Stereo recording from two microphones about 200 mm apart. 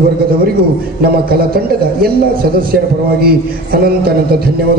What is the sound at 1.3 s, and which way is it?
A man's voice, 50° right (ahead or behind).